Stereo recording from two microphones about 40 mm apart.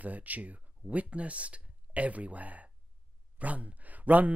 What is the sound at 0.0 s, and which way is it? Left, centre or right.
Speech, right.